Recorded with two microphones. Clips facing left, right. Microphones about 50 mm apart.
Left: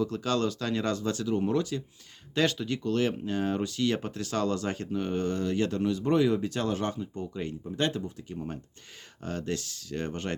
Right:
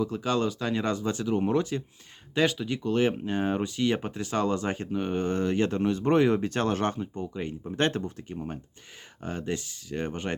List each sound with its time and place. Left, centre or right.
0.0 s speech: centre; by 1.8 s right
2.3 s speech: centre
5.3 s speech: right
7.3 s speech: centre
7.8 s speech: right
9.2 s speech: centre